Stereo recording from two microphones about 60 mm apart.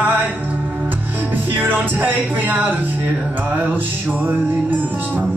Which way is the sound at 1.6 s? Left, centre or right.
Right.